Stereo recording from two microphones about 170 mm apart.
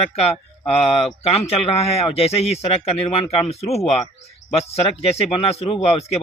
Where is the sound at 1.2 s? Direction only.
35° left (ahead or behind).